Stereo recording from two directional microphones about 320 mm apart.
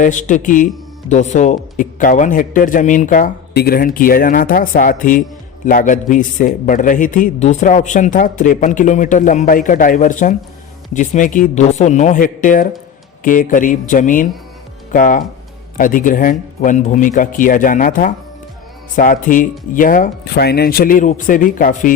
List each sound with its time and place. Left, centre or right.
0.0 s a man's voice: left